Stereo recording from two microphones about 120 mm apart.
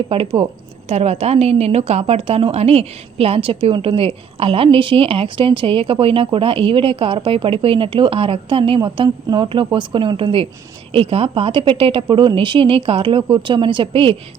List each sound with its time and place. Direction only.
0.1 s a woman's voice: 50° right (ahead or behind)
0.9 s a woman's voice: 60° right (ahead or behind)